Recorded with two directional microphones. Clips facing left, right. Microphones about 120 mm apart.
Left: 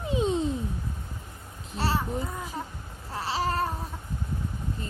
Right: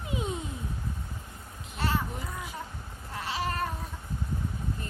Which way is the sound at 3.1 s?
35° left (ahead or behind).